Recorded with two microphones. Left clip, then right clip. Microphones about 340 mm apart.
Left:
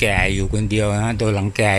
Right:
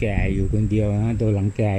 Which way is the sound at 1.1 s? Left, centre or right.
Left.